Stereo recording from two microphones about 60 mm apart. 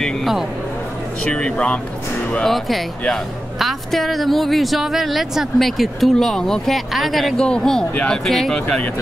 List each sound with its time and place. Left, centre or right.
0.0 s speech: centre
1.2 s speech: centre
2.4 s a woman's voice: centre